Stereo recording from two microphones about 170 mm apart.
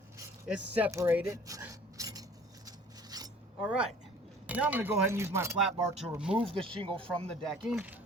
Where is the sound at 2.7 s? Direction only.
20° right (ahead or behind).